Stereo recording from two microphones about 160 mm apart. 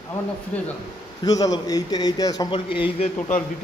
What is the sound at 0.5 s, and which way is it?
Speech, 10° left (ahead or behind).